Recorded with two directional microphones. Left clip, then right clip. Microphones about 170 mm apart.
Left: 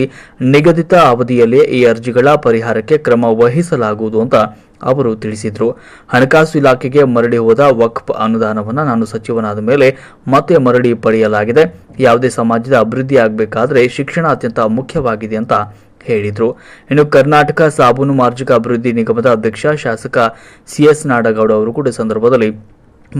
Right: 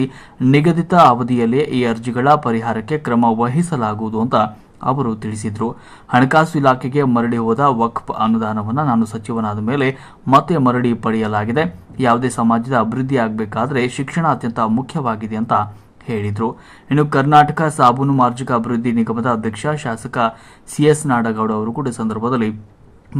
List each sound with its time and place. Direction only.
0.0 s a man's voice: 10° left (ahead or behind)